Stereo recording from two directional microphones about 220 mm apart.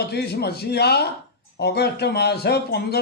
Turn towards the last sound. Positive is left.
turn(degrees=45)  # may be behind; listen again after turning